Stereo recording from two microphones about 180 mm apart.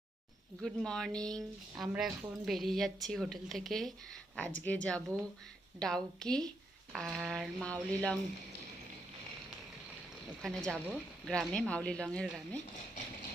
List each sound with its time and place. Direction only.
0.6 s speech: centre (ahead or behind)
10.4 s speech: 5° left (ahead or behind)